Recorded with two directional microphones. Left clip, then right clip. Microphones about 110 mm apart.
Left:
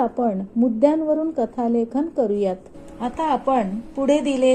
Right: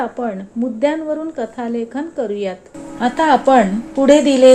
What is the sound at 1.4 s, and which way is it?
A woman's voice, 40° left (ahead or behind).